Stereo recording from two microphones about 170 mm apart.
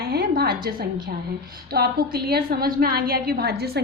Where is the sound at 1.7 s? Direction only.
65° right (ahead or behind).